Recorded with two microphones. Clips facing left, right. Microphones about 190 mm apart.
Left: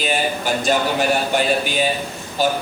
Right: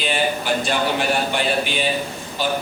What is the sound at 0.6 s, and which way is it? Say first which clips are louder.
Speech: left 5 dB; 45° left (ahead or behind).